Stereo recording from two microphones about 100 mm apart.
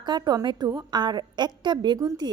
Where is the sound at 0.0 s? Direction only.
45° right (ahead or behind).